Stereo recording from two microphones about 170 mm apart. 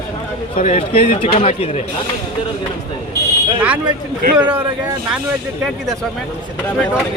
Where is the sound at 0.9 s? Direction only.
35° left (ahead or behind).